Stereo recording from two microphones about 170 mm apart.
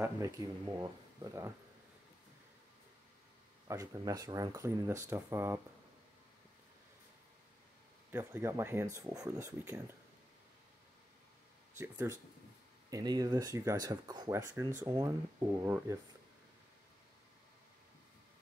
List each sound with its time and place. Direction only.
0.0 s speech: 20° right (ahead or behind)
3.6 s speech: 20° right (ahead or behind)
8.1 s speech: 15° right (ahead or behind)
11.8 s speech: 10° right (ahead or behind)
12.9 s speech: 20° right (ahead or behind)